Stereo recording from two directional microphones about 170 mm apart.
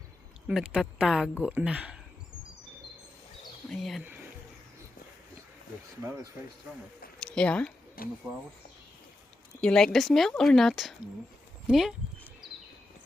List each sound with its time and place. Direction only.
0.4 s speech: 5° right (ahead or behind)
3.7 s speech: centre (ahead or behind)
6.0 s speech: 20° right (ahead or behind)
7.2 s speech: 5° left (ahead or behind)
8.0 s speech: 55° left (ahead or behind)
9.6 s speech: 5° left (ahead or behind)
11.7 s a sound: 5° right (ahead or behind)